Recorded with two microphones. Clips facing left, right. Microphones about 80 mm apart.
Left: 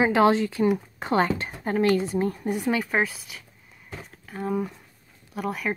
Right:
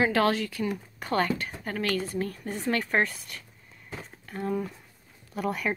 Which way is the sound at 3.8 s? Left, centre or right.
Centre.